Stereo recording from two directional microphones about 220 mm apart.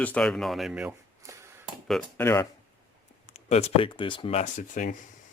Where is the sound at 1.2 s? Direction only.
10° right (ahead or behind).